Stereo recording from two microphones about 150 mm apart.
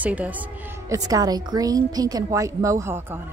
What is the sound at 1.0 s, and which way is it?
A woman's voice, 25° right (ahead or behind).